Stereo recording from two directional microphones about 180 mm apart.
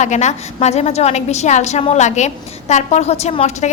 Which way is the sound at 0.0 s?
40° left (ahead or behind).